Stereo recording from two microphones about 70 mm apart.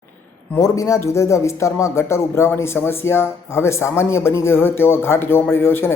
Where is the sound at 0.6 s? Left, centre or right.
Left.